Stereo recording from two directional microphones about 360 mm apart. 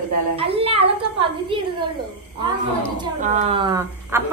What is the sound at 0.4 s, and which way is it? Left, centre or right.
Speech, centre.